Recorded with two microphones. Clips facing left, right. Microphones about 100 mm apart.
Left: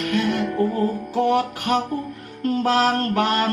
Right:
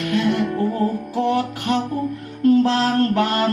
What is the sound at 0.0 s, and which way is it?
Music, 30° right (ahead or behind).